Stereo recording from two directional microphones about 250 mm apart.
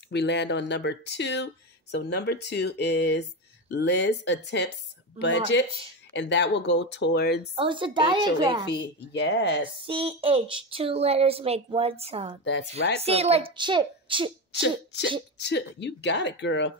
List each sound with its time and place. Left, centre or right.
0.1 s speech: left
7.5 s speech: centre
8.6 s speech: left
9.8 s speech: right
14.6 s speech: left